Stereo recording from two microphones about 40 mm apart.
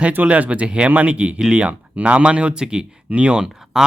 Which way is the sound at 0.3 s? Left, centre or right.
Right.